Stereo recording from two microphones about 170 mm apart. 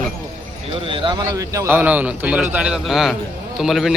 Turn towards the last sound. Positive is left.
turn(degrees=0)  # may be behind; listen again after turning